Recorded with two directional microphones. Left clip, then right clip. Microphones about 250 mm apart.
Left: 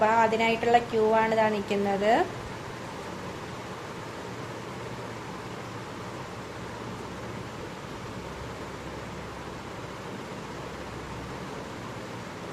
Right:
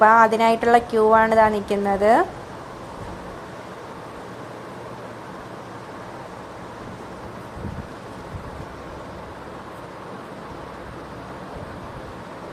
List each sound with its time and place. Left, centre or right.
0.0 s a woman's voice: centre